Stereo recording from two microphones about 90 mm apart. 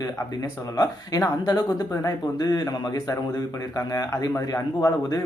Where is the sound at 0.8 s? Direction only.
45° left (ahead or behind).